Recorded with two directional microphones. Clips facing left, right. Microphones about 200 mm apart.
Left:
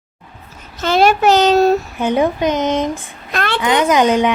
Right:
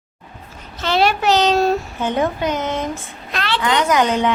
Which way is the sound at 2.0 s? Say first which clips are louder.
Left 4 dB; 15° left (ahead or behind).